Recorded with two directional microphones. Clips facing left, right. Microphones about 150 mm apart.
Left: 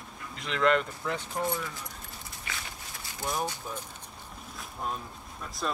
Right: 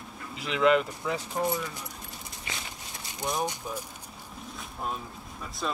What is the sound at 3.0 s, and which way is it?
Speech, 15° right (ahead or behind).